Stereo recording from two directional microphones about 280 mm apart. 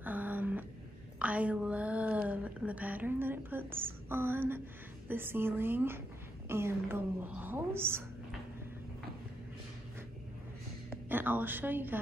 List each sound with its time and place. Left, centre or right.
0.0 s a sound: centre
5.0 s a woman's voice: centre
10.9 s a woman's voice: centre